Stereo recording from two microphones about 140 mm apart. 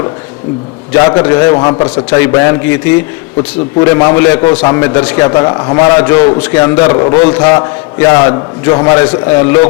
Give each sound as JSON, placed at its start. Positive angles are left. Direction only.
{"t": 0.9, "sound": "a man's voice", "side_deg": 20}
{"t": 2.0, "sound": "a man's voice", "side_deg": 15}
{"t": 5.8, "sound": "a man's voice", "side_deg": 15}